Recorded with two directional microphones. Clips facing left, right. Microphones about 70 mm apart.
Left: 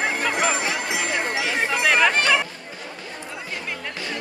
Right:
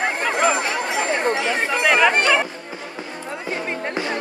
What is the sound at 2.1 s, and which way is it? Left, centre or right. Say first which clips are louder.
Music: right 2 dB; right.